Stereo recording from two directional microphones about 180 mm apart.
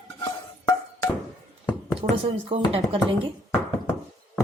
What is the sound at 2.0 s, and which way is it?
Speech, 30° right (ahead or behind).